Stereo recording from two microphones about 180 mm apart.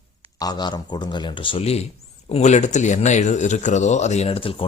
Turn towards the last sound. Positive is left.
turn(degrees=30)  # may be behind; listen again after turning